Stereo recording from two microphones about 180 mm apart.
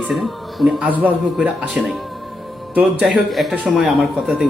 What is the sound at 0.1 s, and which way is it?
Speech, centre (ahead or behind).